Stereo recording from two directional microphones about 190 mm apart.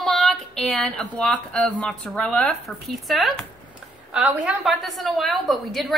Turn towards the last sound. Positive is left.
turn(degrees=0)  # may be behind; listen again after turning